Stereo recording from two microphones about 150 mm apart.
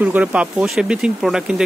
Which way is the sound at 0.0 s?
10° right (ahead or behind).